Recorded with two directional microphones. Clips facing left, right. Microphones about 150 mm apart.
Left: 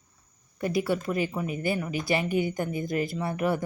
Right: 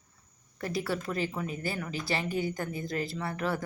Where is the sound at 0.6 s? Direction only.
15° left (ahead or behind).